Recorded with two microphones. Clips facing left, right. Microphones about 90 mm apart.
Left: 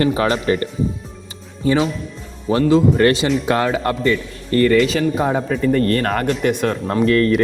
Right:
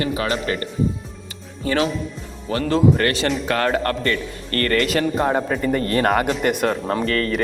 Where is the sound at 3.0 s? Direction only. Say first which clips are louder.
Left 5 dB; 15° left (ahead or behind).